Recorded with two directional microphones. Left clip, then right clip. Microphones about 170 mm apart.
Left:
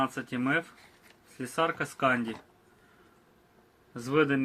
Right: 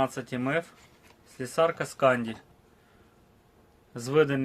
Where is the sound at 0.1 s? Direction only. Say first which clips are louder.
Even; 70° right (ahead or behind).